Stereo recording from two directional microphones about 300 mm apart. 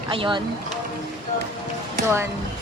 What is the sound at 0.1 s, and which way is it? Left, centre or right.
Speech, centre.